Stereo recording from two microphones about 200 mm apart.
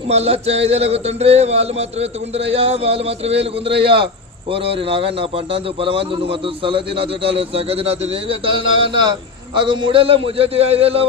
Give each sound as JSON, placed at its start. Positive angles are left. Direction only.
{"t": 0.1, "sound": "a man's voice", "side_deg": -30}